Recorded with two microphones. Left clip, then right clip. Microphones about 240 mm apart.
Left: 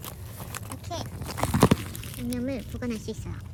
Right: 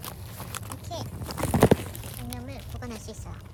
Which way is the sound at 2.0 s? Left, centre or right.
Centre.